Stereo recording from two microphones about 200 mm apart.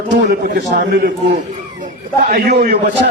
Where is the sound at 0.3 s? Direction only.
60° right (ahead or behind).